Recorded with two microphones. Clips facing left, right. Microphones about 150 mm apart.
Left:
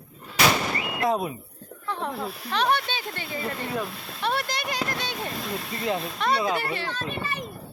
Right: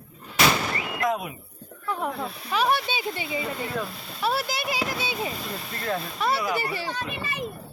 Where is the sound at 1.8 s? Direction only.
10° right (ahead or behind).